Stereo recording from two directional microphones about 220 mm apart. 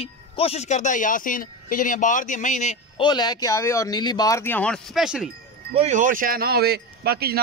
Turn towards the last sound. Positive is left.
turn(degrees=-45)  # may be behind; listen again after turning